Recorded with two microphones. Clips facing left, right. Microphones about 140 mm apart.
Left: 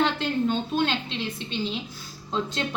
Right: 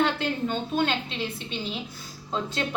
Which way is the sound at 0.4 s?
5° right (ahead or behind).